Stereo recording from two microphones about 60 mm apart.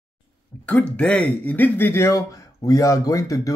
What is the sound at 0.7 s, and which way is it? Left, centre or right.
Speech, left.